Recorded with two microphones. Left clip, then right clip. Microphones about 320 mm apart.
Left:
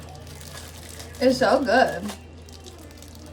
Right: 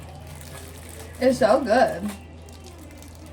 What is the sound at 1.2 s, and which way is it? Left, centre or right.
Speech, centre.